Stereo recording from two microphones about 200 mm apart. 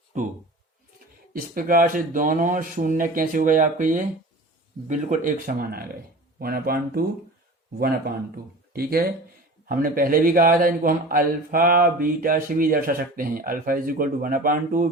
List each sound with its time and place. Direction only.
1.3 s a man's voice: 45° right (ahead or behind)